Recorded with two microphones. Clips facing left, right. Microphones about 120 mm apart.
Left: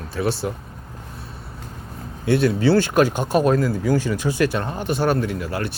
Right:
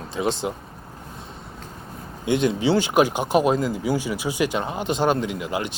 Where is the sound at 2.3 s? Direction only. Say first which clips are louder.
Left 3 dB; 20° right (ahead or behind).